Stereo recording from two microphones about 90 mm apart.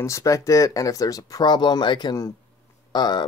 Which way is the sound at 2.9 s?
50° left (ahead or behind).